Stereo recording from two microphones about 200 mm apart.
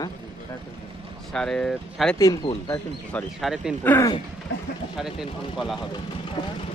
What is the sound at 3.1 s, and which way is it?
Speech, centre (ahead or behind).